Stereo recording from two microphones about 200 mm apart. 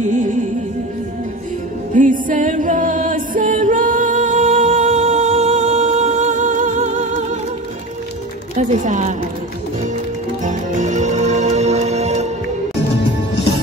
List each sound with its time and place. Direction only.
0.0 s speech: 40° right (ahead or behind)
2.0 s music: 40° right (ahead or behind)
8.5 s speech: 40° right (ahead or behind)
10.4 s music: 40° right (ahead or behind)